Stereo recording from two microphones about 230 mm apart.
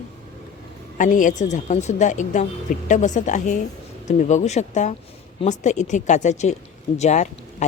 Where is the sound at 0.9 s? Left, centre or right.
Left.